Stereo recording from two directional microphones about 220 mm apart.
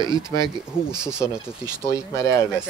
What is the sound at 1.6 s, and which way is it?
Speech, 15° left (ahead or behind).